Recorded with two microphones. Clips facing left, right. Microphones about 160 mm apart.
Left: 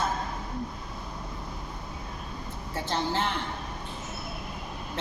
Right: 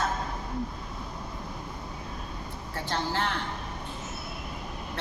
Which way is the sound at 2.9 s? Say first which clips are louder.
Left 1 dB; 20° left (ahead or behind).